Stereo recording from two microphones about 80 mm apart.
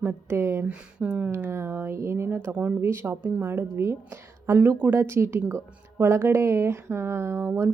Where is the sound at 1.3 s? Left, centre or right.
Right.